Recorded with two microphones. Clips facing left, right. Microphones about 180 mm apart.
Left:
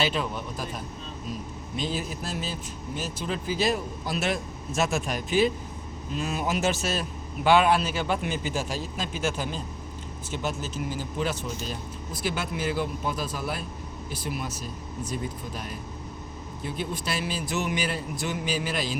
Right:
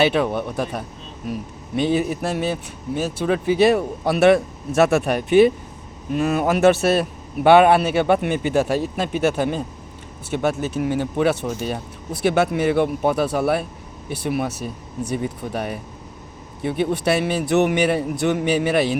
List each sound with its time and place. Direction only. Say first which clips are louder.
0.0 s a man's voice: right 9 dB; 65° right (ahead or behind)